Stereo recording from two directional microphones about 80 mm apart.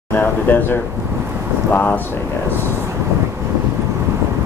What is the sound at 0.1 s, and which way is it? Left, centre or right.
Speech, left.